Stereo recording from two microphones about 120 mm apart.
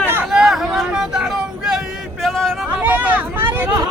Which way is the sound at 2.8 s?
15° right (ahead or behind).